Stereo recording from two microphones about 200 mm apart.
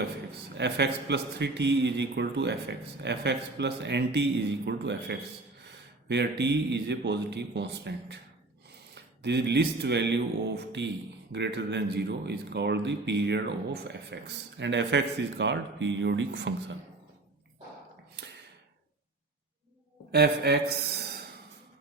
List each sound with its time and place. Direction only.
0.5 s a man's voice: 60° right (ahead or behind)
9.2 s a man's voice: 60° right (ahead or behind)
20.1 s speech: 55° right (ahead or behind)